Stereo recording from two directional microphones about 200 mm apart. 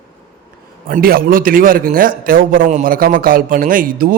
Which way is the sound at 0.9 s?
45° right (ahead or behind).